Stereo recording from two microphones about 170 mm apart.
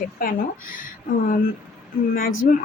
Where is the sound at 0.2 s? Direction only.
55° left (ahead or behind).